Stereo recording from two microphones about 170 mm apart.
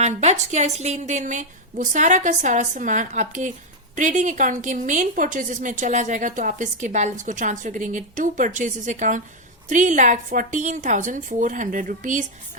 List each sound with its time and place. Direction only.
0.0 s a woman's voice: 40° right (ahead or behind)